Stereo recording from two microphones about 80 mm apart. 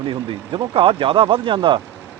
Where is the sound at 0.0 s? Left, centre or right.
Right.